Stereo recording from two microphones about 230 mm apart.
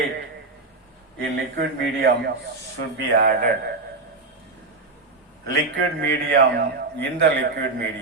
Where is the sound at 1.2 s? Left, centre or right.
Right.